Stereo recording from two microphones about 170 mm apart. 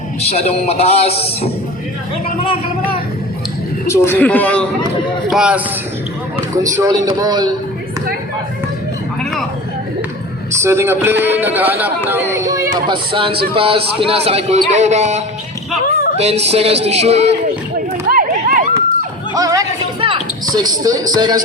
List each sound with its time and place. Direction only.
0.3 s a man's voice: 40° left (ahead or behind)
3.8 s a man's voice: 15° left (ahead or behind)
5.3 s speech: 5° right (ahead or behind)
6.6 s a man's voice: 20° right (ahead or behind)
10.6 s a man's voice: 15° right (ahead or behind)
12.9 s speech: 30° right (ahead or behind)
18.1 s run: 55° right (ahead or behind)
19.3 s a sound: 20° right (ahead or behind)
20.0 s speech: 30° right (ahead or behind)